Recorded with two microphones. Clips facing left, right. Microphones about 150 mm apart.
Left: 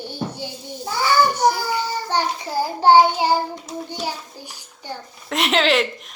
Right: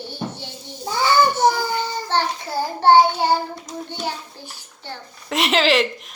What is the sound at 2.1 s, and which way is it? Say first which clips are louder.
A child's voice: right 2 dB; 10° left (ahead or behind).